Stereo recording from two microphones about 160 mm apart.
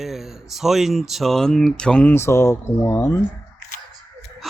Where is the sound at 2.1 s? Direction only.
15° left (ahead or behind).